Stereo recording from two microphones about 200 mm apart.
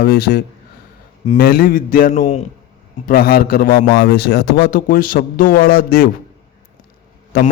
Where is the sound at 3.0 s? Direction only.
50° left (ahead or behind).